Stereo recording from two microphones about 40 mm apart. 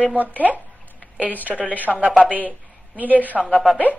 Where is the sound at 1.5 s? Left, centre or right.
Left.